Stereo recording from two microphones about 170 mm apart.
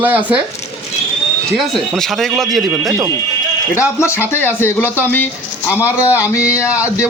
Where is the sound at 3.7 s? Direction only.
15° left (ahead or behind).